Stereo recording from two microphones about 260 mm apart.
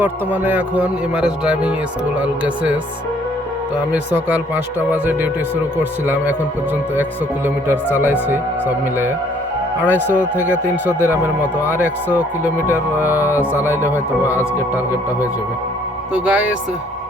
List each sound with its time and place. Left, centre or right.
0.0 s a man's voice: centre
3.9 s speech: centre
7.4 s speech: centre
9.9 s speech: centre
10.8 s a man's voice: centre
16.1 s a man's voice: centre